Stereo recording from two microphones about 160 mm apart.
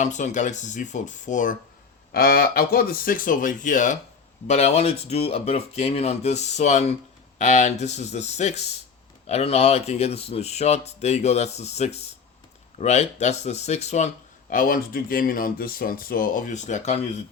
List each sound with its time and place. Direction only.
0.0 s speech: 50° left (ahead or behind)
2.1 s speech: 70° left (ahead or behind); by 14.1 s 45° left (ahead or behind)
14.5 s speech: 60° left (ahead or behind)